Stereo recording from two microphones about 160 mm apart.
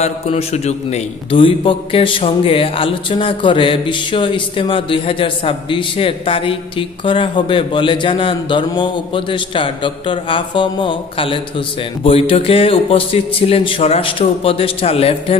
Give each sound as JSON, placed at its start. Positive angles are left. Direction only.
{"t": 0.0, "sound": "a man's voice", "side_deg": 40}